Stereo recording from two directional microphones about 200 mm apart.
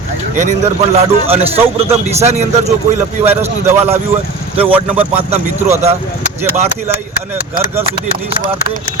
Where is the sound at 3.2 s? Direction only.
10° right (ahead or behind).